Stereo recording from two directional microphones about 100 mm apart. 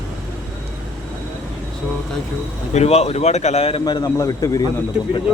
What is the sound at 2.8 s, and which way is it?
Speech, 90° left.